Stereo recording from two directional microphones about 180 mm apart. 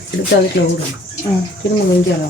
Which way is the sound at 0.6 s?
85° left.